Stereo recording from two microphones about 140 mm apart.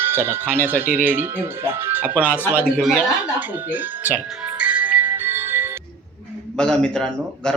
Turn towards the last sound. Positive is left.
turn(degrees=5)  # may be behind; listen again after turning